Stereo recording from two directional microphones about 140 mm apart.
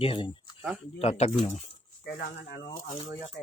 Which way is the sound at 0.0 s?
40° left (ahead or behind).